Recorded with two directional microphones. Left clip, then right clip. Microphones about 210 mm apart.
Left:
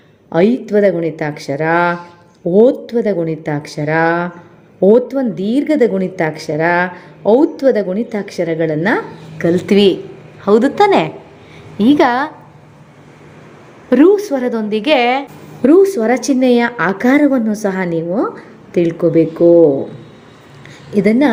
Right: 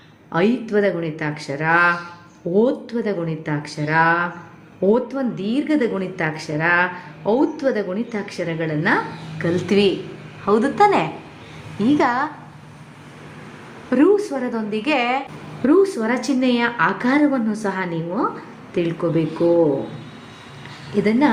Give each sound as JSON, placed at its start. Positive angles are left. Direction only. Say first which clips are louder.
{"t": 0.3, "sound": "a woman's voice", "louder": "left 6 dB", "side_deg": 40}
{"t": 13.9, "sound": "a woman's voice", "louder": "left 6 dB", "side_deg": 40}
{"t": 20.9, "sound": "a woman's voice", "louder": "left 6 dB", "side_deg": 45}